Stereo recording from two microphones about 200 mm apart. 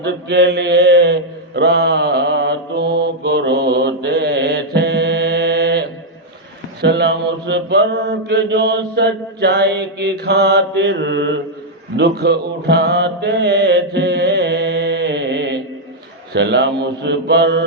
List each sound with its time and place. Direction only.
0.0 s mantra: 60° right (ahead or behind)
6.8 s mantra: 55° right (ahead or behind)